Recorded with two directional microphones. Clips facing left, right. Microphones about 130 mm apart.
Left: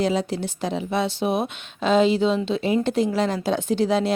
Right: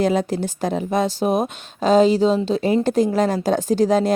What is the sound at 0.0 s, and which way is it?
Speech, 50° right (ahead or behind).